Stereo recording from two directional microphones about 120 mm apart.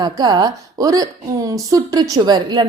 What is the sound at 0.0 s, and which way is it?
A woman's voice, 35° right (ahead or behind).